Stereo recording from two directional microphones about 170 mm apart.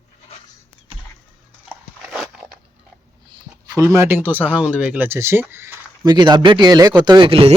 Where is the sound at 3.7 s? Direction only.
15° right (ahead or behind).